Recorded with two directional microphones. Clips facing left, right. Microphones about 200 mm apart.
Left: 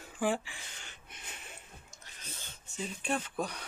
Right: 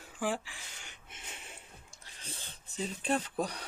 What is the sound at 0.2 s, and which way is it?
Speech, centre (ahead or behind).